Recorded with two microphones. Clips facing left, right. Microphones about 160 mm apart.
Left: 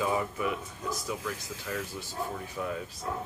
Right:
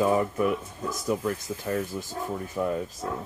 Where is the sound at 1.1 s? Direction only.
35° right (ahead or behind).